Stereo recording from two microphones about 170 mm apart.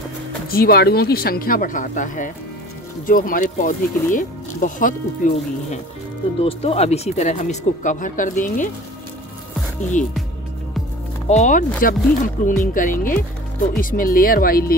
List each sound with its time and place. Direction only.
0.5 s speech: 65° left (ahead or behind)
6.4 s speech: 35° left (ahead or behind)
11.2 s speech: 45° left (ahead or behind); by 14.8 s 60° left (ahead or behind)